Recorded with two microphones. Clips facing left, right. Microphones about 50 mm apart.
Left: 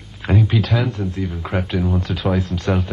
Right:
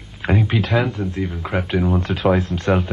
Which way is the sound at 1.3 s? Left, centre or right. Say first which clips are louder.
Even; centre.